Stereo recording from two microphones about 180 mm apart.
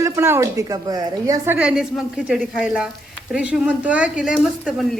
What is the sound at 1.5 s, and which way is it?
Speech, 5° right (ahead or behind).